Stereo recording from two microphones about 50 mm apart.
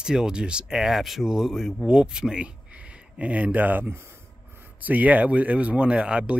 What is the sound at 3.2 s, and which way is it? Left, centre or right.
Speech, right.